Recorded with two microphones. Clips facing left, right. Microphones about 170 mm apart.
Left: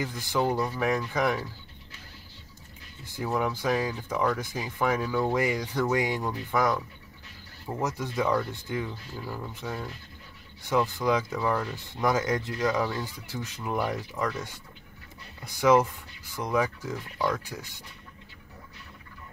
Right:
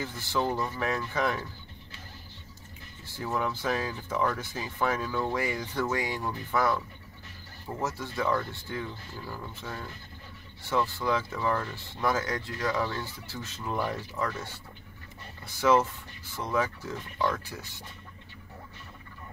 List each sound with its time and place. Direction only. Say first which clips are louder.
0.0 s speech: left 3 dB; 15° left (ahead or behind)
3.1 s speech: left 3 dB; 15° left (ahead or behind)